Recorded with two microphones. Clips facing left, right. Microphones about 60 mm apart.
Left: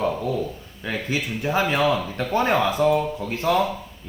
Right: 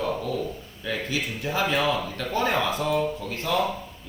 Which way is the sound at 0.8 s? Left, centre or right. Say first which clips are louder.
Left 2 dB; left.